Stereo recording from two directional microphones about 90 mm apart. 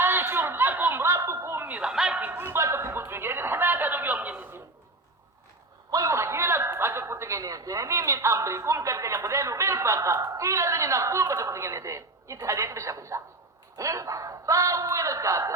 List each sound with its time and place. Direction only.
0.0 s snicker: 25° right (ahead or behind); by 2.2 s 10° right (ahead or behind)
2.2 s a sound: 25° right (ahead or behind)
5.9 s a man's voice: 35° right (ahead or behind)